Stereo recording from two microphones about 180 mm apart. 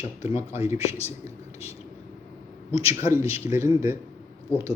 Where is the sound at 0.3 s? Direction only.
15° right (ahead or behind).